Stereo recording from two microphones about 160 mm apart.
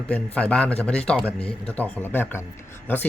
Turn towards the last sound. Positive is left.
turn(degrees=10)  # may be behind; listen again after turning